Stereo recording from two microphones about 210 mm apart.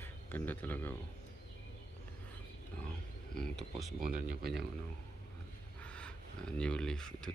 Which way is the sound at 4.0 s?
40° right (ahead or behind).